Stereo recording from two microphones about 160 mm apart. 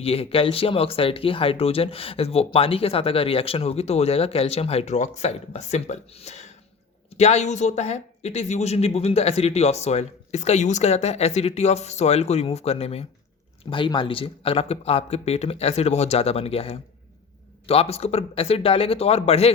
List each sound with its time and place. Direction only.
0.0 s speech: 35° left (ahead or behind)